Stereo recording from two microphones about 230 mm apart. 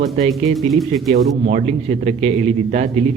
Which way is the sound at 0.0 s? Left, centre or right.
Right.